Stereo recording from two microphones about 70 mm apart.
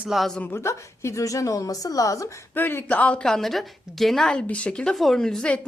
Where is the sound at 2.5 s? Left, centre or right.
Left.